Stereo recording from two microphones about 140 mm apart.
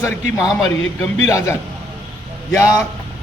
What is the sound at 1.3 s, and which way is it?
Speech, 20° left (ahead or behind).